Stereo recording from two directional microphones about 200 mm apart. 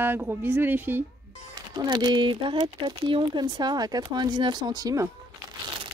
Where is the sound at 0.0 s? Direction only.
10° right (ahead or behind).